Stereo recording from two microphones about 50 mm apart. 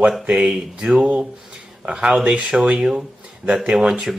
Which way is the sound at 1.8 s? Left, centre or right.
Right.